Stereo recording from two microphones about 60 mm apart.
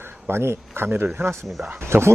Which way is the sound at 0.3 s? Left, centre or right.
Right.